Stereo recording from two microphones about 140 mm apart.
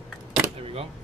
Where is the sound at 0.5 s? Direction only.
45° right (ahead or behind).